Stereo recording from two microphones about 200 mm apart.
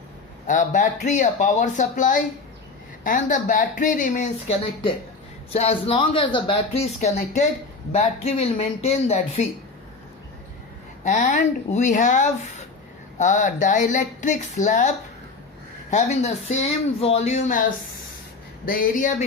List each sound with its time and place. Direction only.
0.4 s speech: 40° left (ahead or behind)
7.9 s speech: 30° left (ahead or behind)
11.0 s speech: 40° left (ahead or behind)
18.6 s speech: 45° left (ahead or behind)